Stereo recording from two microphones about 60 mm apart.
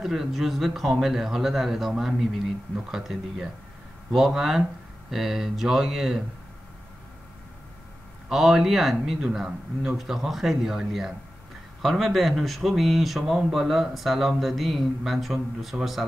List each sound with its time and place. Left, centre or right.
0.0 s speech: centre
8.3 s speech: centre